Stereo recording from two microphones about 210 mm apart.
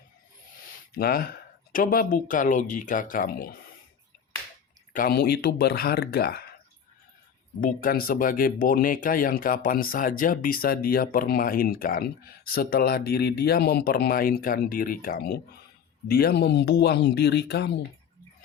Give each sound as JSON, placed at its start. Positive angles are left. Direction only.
{"t": 0.6, "sound": "speech", "side_deg": 45}
{"t": 4.9, "sound": "speech", "side_deg": 45}
{"t": 7.6, "sound": "speech", "side_deg": 45}